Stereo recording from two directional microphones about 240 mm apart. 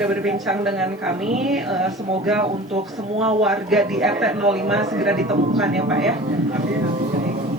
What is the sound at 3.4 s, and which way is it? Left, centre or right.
Speech, centre.